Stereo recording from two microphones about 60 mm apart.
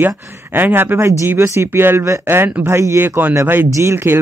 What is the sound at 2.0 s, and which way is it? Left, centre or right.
Speech, right.